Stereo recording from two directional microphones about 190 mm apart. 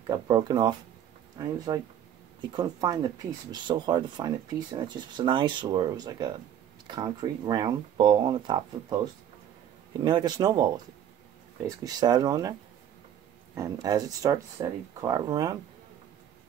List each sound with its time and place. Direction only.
0.0 s speech: 20° right (ahead or behind)
9.9 s speech: 25° right (ahead or behind)
13.6 s speech: 20° right (ahead or behind)